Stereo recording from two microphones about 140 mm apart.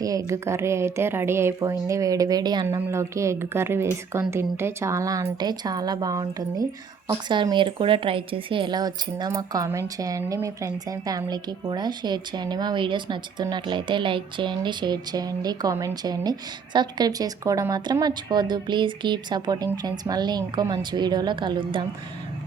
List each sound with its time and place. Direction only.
0.0 s speech: 25° right (ahead or behind)